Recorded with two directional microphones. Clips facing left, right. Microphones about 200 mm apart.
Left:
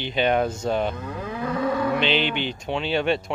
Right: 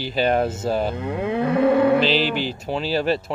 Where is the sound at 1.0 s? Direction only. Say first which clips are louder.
Right 7 dB; 65° right (ahead or behind).